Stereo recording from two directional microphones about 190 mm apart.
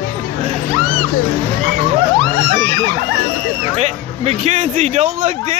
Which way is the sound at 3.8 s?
35° right (ahead or behind).